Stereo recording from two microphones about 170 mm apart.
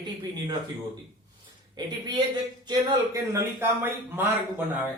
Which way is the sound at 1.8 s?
25° right (ahead or behind).